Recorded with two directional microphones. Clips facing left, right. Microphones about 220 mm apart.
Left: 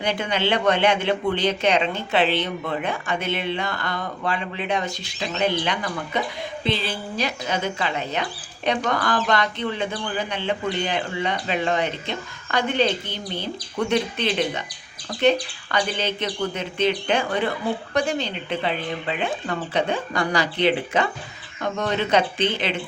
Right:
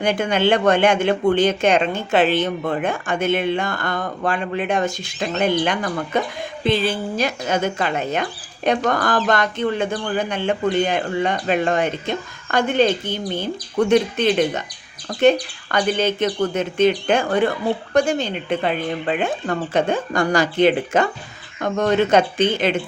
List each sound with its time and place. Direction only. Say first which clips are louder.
0.0 s speech: right 5 dB; 45° right (ahead or behind)